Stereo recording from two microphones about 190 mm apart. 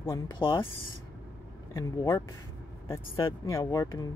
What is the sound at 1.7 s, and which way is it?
Speech, 15° left (ahead or behind).